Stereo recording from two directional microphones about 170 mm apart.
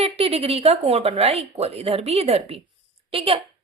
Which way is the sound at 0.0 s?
35° right (ahead or behind).